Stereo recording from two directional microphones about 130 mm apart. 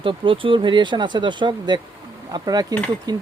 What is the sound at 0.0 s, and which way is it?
Speech, 40° right (ahead or behind).